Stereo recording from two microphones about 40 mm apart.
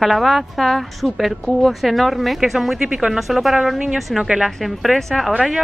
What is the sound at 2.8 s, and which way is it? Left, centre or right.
Speech, right.